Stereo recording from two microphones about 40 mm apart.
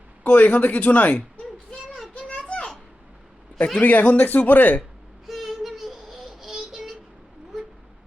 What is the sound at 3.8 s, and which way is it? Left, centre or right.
Speech, left.